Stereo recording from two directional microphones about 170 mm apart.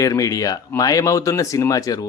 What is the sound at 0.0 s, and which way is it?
Speech, 20° left (ahead or behind).